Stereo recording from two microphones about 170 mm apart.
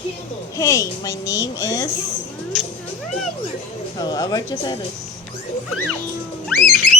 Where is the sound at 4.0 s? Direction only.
25° left (ahead or behind).